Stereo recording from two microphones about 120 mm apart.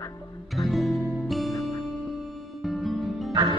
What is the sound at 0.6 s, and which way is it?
Music, centre (ahead or behind).